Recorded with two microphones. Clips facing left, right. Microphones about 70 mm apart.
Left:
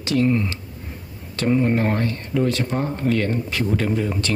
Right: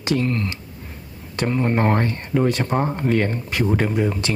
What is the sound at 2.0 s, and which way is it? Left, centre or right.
Speech, right.